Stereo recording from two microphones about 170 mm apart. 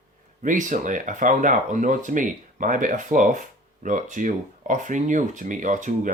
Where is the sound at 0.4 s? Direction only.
50° right (ahead or behind).